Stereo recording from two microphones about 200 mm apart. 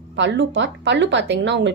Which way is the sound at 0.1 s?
65° right (ahead or behind).